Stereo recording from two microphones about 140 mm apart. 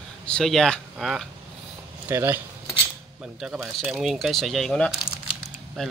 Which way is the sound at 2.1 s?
15° right (ahead or behind).